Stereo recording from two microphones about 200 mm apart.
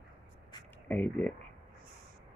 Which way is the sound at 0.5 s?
20° left (ahead or behind).